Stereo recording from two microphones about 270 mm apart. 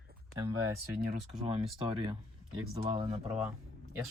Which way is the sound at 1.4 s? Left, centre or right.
Right.